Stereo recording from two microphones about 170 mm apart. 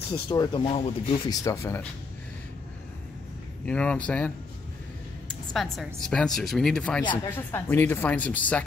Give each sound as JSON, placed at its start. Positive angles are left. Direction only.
{"t": 0.1, "sound": "speech", "side_deg": 25}
{"t": 1.3, "sound": "speech", "side_deg": 20}
{"t": 3.6, "sound": "speech", "side_deg": 5}
{"t": 5.3, "sound": "speech", "side_deg": 5}